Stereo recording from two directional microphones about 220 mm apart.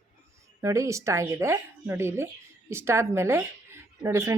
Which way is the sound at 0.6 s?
15° right (ahead or behind).